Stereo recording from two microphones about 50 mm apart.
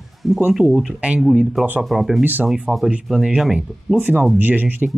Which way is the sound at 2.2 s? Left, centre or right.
Right.